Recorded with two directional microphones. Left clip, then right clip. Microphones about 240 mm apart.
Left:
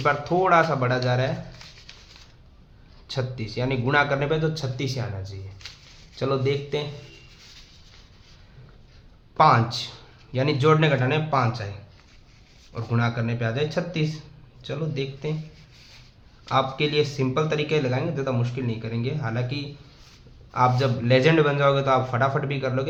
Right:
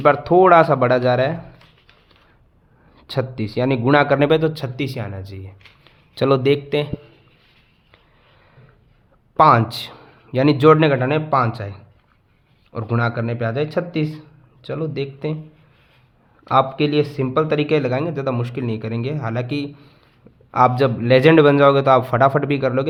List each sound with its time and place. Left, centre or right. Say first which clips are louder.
0.0 s speech: right 9 dB; right
3.1 s speech: right 7 dB; right
9.4 s speech: right 5 dB; right
12.7 s speech: right 6 dB; right
16.4 s speech: right 6 dB; right